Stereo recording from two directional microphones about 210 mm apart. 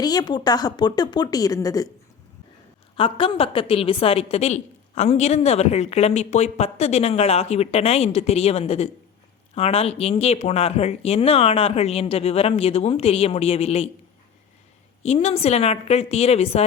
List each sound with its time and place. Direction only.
0.0 s a woman's voice: 20° left (ahead or behind)
2.9 s a woman's voice: 25° left (ahead or behind)
15.0 s a woman's voice: 30° left (ahead or behind)